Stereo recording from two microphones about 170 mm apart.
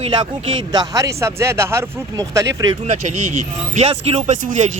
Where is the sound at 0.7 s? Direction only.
20° right (ahead or behind).